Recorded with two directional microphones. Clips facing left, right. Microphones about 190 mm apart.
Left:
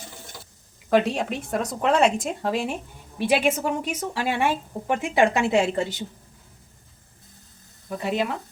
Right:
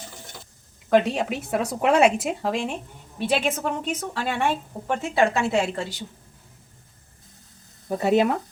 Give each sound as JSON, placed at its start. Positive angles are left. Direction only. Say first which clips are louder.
{"t": 0.9, "sound": "speech", "louder": "right 1 dB", "side_deg": 0}
{"t": 7.9, "sound": "speech", "louder": "right 6 dB", "side_deg": -45}